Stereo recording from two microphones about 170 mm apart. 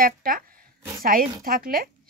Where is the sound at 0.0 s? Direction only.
55° right (ahead or behind).